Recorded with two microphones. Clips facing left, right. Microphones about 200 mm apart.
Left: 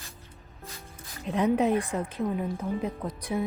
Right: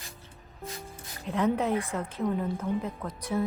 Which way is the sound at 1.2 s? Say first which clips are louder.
Left 3 dB; 15° left (ahead or behind).